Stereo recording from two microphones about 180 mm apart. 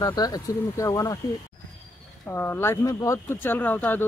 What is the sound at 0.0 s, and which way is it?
Speech, 20° left (ahead or behind).